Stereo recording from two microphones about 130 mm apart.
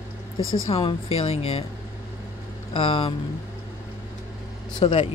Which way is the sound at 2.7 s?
40° left (ahead or behind).